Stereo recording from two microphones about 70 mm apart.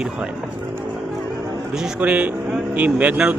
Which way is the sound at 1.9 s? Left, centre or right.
Right.